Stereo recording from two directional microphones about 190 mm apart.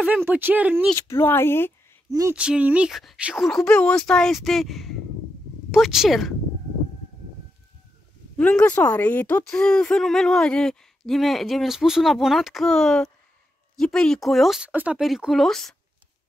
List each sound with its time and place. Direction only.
0.0 s speech: 10° right (ahead or behind)
0.9 s speech: 15° left (ahead or behind)
2.0 s a sound: 15° right (ahead or behind)
2.3 s speech: 5° right (ahead or behind)
8.4 s speech: 5° left (ahead or behind)